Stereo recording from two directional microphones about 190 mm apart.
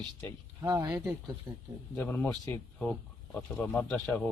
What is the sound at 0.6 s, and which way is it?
Speech, 20° right (ahead or behind).